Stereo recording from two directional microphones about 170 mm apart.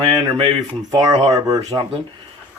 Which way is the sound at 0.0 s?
30° right (ahead or behind).